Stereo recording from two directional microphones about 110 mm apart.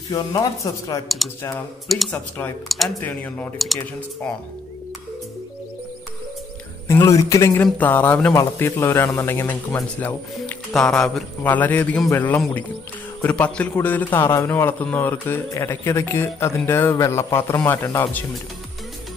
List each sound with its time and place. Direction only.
0.1 s speech: 35° left (ahead or behind)
1.9 s speech: centre (ahead or behind)
2.1 s speech: 15° left (ahead or behind)
2.7 s speech: centre (ahead or behind)
3.0 s speech: 15° left (ahead or behind)
3.5 s speech: centre (ahead or behind)
7.1 s speech: 30° left (ahead or behind)
7.5 s speech: 15° left (ahead or behind)
8.3 s a man's voice: 25° left (ahead or behind)
10.7 s speech: 5° left (ahead or behind)
11.4 s a man's voice: 15° left (ahead or behind)